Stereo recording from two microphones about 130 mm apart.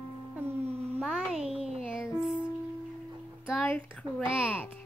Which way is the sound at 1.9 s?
5° right (ahead or behind).